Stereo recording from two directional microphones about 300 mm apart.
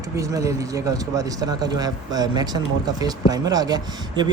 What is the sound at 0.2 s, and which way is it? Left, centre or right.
Speech, centre.